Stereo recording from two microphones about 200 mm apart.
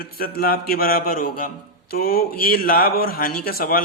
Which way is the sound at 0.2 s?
45° left (ahead or behind).